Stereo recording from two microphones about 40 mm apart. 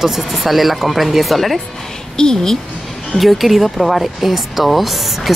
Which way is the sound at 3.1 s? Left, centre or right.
Centre.